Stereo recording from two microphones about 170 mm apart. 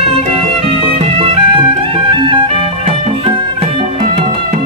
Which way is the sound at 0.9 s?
35° right (ahead or behind).